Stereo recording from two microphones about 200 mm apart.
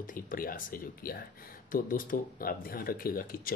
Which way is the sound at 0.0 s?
45° left (ahead or behind).